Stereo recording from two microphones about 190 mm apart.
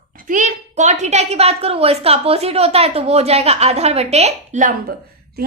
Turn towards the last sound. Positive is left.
turn(degrees=-40)  # may be behind; listen again after turning